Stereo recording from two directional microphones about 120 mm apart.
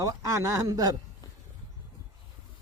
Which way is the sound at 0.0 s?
25° right (ahead or behind).